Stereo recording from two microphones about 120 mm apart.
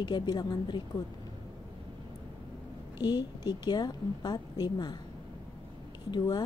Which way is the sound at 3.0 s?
35° left (ahead or behind).